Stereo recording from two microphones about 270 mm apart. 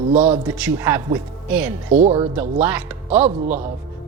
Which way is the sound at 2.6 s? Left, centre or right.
Centre.